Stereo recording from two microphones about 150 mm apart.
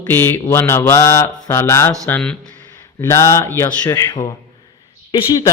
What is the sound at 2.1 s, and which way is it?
Mantra, 5° left (ahead or behind).